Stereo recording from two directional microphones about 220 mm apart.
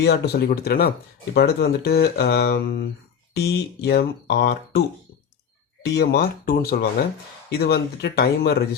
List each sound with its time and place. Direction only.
0.0 s speech: 45° left (ahead or behind)
5.8 s speech: 50° left (ahead or behind)